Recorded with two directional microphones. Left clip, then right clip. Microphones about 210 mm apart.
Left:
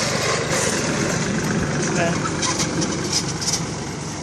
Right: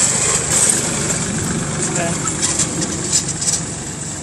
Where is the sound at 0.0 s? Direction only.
50° right (ahead or behind); by 3.6 s 25° right (ahead or behind).